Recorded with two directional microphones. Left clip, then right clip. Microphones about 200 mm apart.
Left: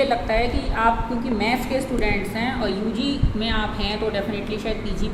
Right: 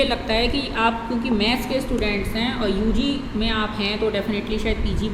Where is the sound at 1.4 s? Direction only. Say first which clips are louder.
Left 1 dB; 10° right (ahead or behind).